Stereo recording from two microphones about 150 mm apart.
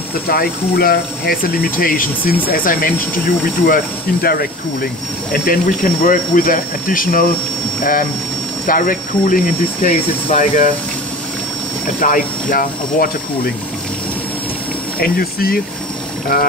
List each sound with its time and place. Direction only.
0.3 s speech: 85° left; by 2.9 s 70° left (ahead or behind)
3.6 s speech: 85° left
5.3 s speech: 70° left (ahead or behind); by 10.7 s 55° left (ahead or behind)
12.0 s speech: 65° left (ahead or behind)
15.0 s speech: 90° left